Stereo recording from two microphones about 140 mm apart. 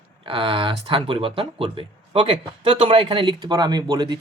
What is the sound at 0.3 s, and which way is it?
Speech, 40° right (ahead or behind).